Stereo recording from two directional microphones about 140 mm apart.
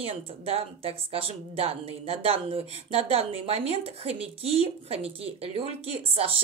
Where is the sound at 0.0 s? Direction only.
45° right (ahead or behind).